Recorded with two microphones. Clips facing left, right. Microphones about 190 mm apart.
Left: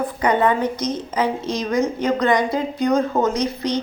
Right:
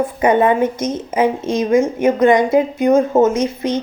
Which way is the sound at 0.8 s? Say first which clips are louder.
Right 3 dB; 50° right (ahead or behind).